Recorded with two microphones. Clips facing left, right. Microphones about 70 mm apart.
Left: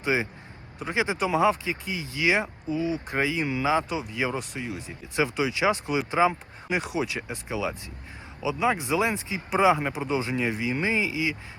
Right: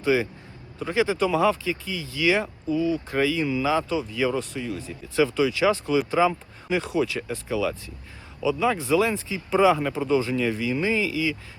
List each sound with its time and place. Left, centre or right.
0.0 s a man's voice: left